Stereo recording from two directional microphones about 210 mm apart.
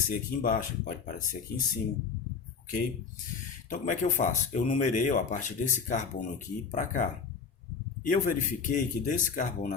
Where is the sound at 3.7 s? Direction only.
35° left (ahead or behind).